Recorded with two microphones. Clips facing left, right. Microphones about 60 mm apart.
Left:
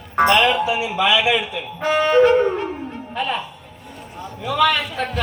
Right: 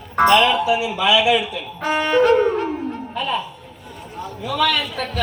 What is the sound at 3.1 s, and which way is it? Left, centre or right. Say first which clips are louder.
Speech: left 1 dB; left.